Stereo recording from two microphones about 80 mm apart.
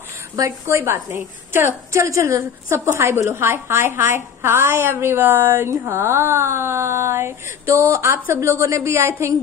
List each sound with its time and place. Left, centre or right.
0.4 s a woman's voice: right